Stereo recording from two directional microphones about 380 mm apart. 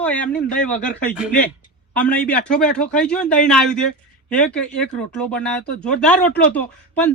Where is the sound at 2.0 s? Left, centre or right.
Centre.